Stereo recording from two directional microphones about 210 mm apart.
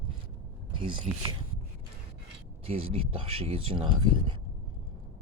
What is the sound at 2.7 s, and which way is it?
Speech, 25° right (ahead or behind).